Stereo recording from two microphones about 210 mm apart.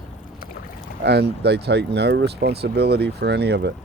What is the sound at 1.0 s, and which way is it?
Speech, 55° right (ahead or behind).